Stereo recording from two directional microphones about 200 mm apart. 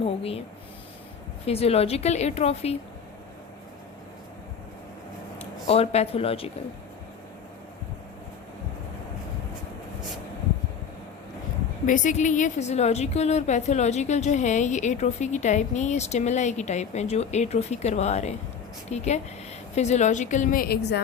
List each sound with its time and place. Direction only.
0.0 s speech: 30° left (ahead or behind)
1.5 s a woman's voice: 30° left (ahead or behind)
5.6 s speech: 30° left (ahead or behind)
11.9 s a woman's voice: 40° left (ahead or behind)